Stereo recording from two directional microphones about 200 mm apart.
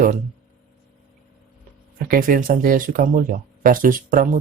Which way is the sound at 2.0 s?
45° right (ahead or behind).